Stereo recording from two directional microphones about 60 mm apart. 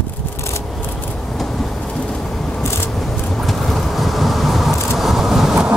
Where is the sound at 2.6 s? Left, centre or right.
Left.